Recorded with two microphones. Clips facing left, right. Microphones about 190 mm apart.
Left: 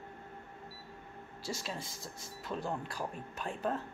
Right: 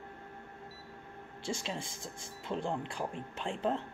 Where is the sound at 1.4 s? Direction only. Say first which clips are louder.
Right 3 dB; 25° right (ahead or behind).